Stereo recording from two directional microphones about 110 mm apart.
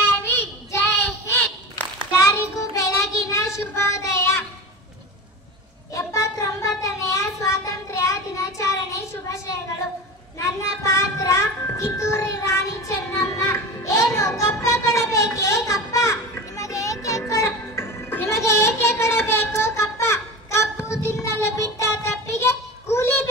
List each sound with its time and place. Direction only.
0.0 s child singing: 20° left (ahead or behind)
5.9 s a sound: 30° left (ahead or behind)
10.4 s child singing: 25° left (ahead or behind)